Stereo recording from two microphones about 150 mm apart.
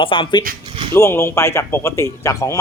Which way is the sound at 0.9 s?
15° left (ahead or behind).